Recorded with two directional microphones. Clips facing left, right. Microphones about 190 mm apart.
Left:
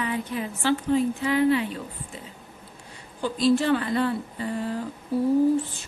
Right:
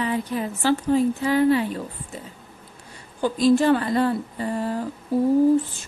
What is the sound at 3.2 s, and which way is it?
A woman's voice, 45° right (ahead or behind).